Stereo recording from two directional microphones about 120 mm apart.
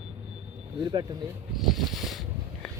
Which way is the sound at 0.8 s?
40° right (ahead or behind).